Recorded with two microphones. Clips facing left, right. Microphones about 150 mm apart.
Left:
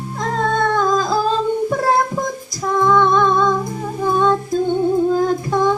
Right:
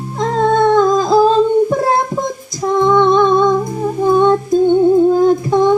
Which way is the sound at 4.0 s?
20° right (ahead or behind).